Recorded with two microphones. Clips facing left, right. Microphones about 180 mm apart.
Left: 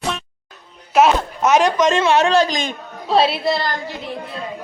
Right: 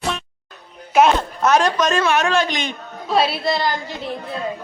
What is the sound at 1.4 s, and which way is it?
A woman's voice, 20° left (ahead or behind).